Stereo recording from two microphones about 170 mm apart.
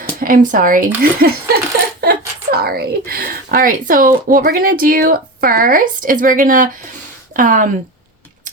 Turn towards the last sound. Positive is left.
turn(degrees=-50)  # may be behind; listen again after turning